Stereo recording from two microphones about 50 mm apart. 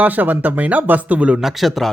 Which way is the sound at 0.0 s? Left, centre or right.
Right.